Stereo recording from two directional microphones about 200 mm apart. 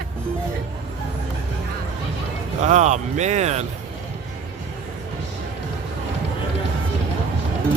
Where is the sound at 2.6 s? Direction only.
35° right (ahead or behind).